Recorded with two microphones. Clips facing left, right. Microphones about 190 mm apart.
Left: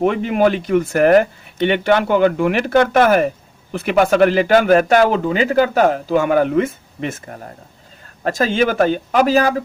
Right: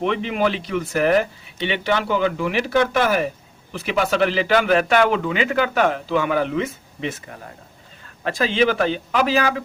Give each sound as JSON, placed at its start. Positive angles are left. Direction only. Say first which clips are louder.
{"t": 0.0, "sound": "a man's voice", "louder": "left 6 dB", "side_deg": 45}